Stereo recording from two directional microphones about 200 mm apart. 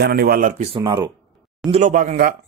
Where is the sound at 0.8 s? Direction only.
20° right (ahead or behind).